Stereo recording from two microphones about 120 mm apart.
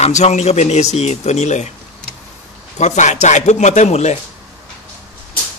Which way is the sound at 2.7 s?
80° left.